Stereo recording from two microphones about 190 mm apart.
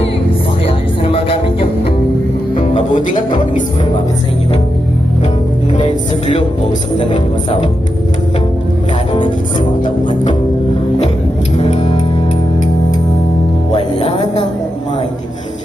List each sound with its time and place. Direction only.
1.0 s music: 30° left (ahead or behind)
2.6 s music: 45° left (ahead or behind)
5.8 s music: 25° left (ahead or behind)
11.5 s music: 30° left (ahead or behind)
13.7 s music: 30° left (ahead or behind)